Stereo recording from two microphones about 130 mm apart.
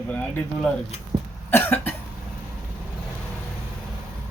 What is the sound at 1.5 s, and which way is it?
Cough, 15° left (ahead or behind).